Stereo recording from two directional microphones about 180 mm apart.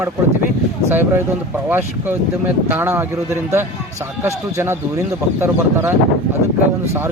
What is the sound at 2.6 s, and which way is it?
Speech, 10° right (ahead or behind).